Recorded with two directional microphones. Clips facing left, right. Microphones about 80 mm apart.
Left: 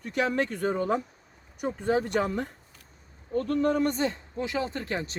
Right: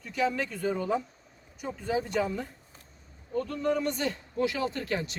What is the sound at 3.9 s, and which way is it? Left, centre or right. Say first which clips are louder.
Speech: left 3 dB; left.